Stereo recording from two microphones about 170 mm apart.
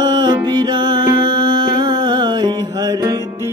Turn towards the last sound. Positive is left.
turn(degrees=-20)  # may be behind; listen again after turning